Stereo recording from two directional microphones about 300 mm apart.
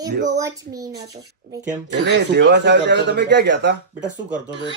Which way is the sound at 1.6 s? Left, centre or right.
Right.